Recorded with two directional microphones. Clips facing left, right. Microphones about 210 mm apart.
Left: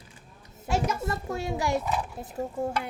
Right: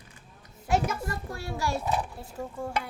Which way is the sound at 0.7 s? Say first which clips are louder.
Even; 20° left (ahead or behind).